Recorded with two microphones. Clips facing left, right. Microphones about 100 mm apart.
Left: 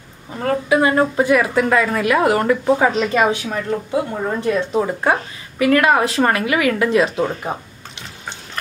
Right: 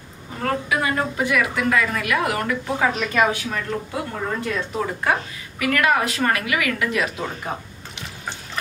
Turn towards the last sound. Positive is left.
turn(degrees=25)  # may be behind; listen again after turning